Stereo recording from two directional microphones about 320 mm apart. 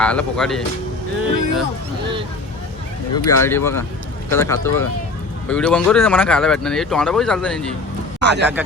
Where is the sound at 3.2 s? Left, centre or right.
Centre.